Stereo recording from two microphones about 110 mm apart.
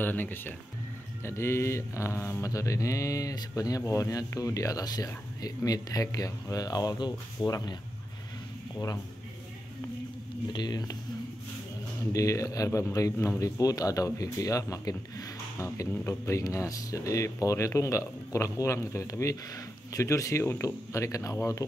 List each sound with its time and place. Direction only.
0.0 s speech: 15° left (ahead or behind); by 7.7 s 35° left (ahead or behind)
10.5 s speech: 40° left (ahead or behind)
12.1 s speech: 30° left (ahead or behind)